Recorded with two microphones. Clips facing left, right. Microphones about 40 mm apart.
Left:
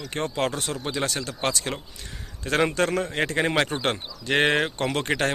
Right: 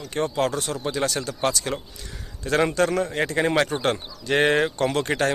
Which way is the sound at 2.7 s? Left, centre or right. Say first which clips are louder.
Right 2 dB; left.